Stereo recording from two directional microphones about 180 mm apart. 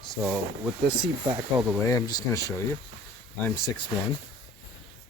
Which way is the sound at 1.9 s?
20° left (ahead or behind).